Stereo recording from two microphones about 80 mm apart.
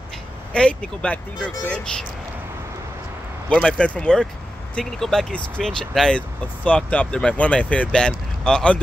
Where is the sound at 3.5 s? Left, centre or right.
Centre.